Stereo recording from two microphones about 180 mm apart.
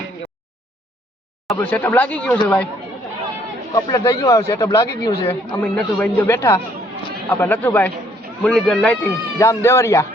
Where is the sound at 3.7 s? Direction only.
20° left (ahead or behind).